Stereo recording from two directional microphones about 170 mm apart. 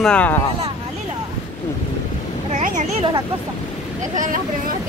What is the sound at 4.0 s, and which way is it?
Speech, 50° right (ahead or behind).